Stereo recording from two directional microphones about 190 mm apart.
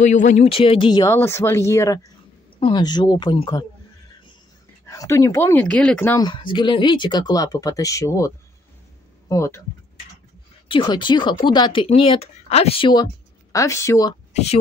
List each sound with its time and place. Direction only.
0.0 s speech: 40° left (ahead or behind); by 3.6 s 25° left (ahead or behind)
4.8 s speech: 15° left (ahead or behind)
6.2 s speech: 25° left (ahead or behind)
9.3 s speech: 15° left (ahead or behind)
10.7 s speech: 25° left (ahead or behind)
14.3 s a woman's voice: 35° left (ahead or behind)